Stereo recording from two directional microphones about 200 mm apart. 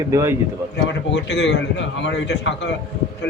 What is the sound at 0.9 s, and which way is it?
A man's voice, 60° left (ahead or behind).